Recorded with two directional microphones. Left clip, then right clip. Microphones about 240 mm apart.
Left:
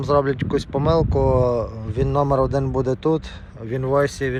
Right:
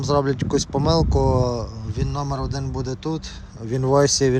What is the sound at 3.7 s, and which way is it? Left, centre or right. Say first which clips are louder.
Speech: right 2 dB; centre.